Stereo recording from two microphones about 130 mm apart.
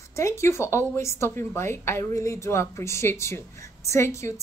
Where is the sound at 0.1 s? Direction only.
20° left (ahead or behind).